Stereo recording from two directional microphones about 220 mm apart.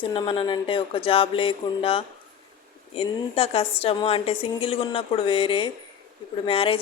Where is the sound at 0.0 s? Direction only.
20° left (ahead or behind).